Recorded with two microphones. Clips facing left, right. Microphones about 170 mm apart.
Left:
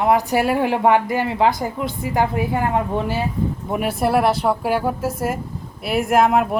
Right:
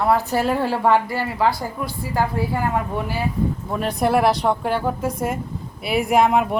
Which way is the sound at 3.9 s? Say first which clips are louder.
Even; centre (ahead or behind).